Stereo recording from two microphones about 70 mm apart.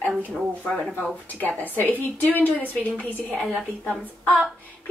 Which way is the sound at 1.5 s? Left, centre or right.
Left.